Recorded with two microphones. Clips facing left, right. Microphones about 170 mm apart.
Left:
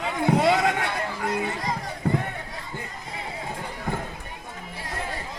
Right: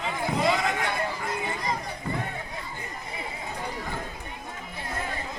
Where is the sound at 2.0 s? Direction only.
55° left (ahead or behind).